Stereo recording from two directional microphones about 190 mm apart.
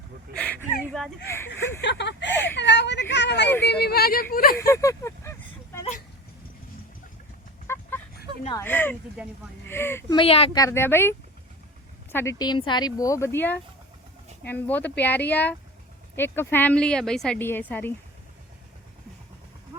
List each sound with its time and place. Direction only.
0.3 s speech: 5° left (ahead or behind)
1.8 s speech: 65° left (ahead or behind)
2.6 s a sound: 65° left (ahead or behind)
3.6 s speech: 60° left (ahead or behind)
4.5 s a sound: 15° left (ahead or behind)
7.7 s vehicle: 10° left (ahead or behind)
8.5 s speech: 10° left (ahead or behind)
9.2 s speech: 5° right (ahead or behind)
9.6 s speech: 10° left (ahead or behind)
10.2 s speech: 30° left (ahead or behind)
10.6 s speech: 15° left (ahead or behind)
12.1 s speech: 15° left (ahead or behind)